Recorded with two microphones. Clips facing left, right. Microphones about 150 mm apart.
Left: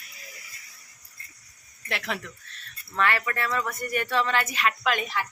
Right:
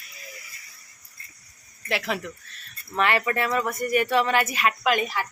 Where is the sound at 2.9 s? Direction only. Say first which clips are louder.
Right 3 dB; 20° right (ahead or behind).